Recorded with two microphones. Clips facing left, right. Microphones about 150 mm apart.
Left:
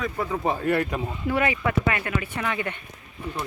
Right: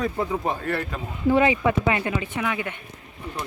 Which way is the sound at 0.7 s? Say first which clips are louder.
Left 4 dB; 15° left (ahead or behind).